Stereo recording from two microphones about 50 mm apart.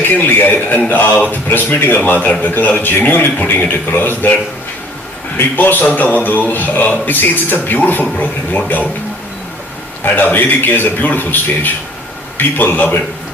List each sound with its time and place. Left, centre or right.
0.0 s speech: left
5.4 s a man's voice: left
5.9 s speech: left
10.0 s speech: left